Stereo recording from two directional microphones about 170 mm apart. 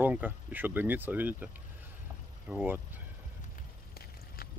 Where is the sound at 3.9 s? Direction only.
65° left (ahead or behind).